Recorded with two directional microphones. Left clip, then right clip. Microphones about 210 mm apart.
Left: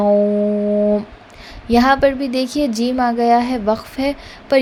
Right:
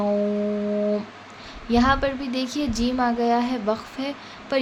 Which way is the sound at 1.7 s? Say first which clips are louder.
Left 8 dB; 30° left (ahead or behind).